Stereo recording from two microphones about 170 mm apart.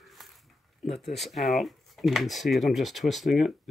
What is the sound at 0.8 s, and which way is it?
Speech, centre (ahead or behind).